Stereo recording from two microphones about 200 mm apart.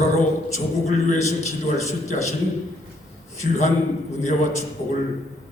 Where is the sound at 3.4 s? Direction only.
35° left (ahead or behind).